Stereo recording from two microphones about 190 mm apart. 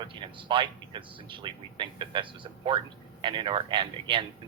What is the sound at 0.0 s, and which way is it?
Speech, 25° right (ahead or behind).